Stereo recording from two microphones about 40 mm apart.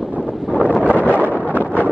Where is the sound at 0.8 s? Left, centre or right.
Right.